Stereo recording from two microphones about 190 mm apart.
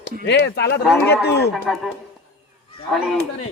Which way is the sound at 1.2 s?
60° left (ahead or behind).